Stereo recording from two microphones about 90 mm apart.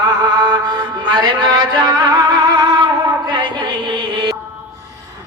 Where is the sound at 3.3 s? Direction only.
60° right (ahead or behind).